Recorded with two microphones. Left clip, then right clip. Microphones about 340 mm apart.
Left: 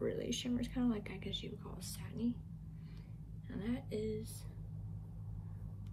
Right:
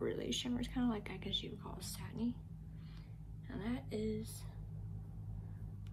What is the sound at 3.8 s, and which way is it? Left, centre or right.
Speech, right.